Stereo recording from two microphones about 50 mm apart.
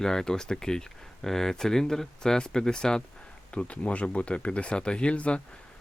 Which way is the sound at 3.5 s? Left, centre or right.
Left.